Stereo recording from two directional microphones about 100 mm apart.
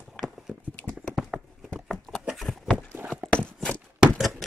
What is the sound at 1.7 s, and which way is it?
Patter, 5° left (ahead or behind).